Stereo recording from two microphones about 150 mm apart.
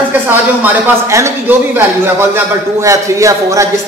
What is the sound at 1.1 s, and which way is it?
A man's voice, 15° right (ahead or behind).